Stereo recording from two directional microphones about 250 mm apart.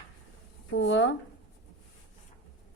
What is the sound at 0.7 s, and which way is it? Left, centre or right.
Speech, left.